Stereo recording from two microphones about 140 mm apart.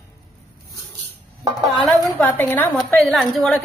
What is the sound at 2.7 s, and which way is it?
Speech, centre (ahead or behind).